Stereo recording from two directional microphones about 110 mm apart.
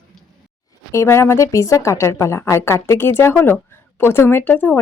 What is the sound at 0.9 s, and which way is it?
A woman's voice, 25° left (ahead or behind).